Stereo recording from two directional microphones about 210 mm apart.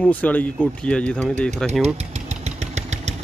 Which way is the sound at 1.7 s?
30° right (ahead or behind).